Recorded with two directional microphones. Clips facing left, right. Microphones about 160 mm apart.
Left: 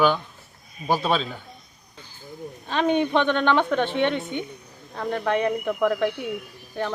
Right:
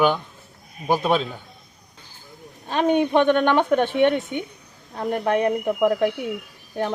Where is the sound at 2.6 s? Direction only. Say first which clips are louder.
Right 2 dB; 10° right (ahead or behind).